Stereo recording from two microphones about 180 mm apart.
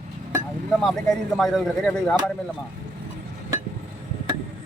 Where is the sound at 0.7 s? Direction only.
Centre (ahead or behind).